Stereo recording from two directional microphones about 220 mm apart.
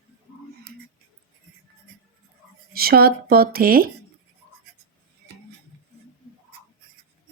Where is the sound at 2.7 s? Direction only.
45° right (ahead or behind).